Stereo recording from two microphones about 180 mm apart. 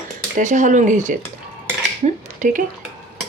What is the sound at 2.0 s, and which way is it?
Dishes, 45° right (ahead or behind).